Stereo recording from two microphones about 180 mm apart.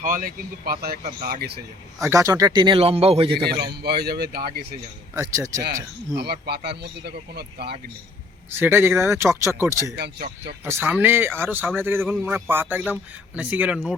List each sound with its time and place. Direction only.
0.0 s speech: 50° right (ahead or behind)
2.0 s speech: 20° right (ahead or behind)
3.8 s speech: 65° right (ahead or behind)
5.1 s speech: 15° right (ahead or behind)
6.1 s speech: 65° right (ahead or behind)
8.5 s speech: 10° right (ahead or behind)
9.9 s speech: 65° right (ahead or behind)
10.7 s speech: 10° right (ahead or behind)